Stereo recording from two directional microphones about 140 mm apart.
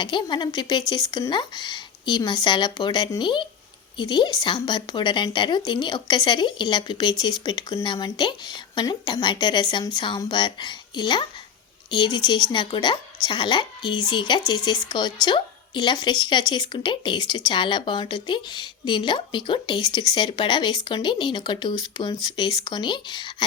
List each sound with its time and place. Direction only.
0.0 s speech: 35° left (ahead or behind)